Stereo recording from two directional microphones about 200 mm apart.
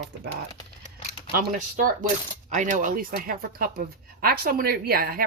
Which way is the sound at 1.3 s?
40° right (ahead or behind).